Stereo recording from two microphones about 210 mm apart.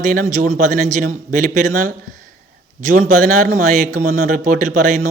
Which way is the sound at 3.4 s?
35° right (ahead or behind).